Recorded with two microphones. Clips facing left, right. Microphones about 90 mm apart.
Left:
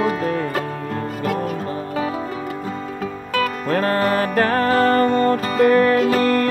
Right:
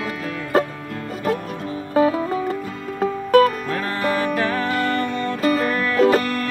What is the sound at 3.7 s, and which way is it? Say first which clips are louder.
Music: left 4 dB; 45° left (ahead or behind).